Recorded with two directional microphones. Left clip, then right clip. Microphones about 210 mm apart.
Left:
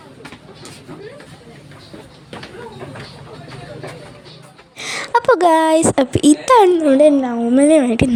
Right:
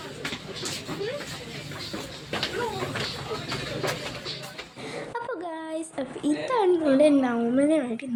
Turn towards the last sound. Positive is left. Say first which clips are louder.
# left 11 dB
turn(degrees=40)  # may be behind; listen again after turning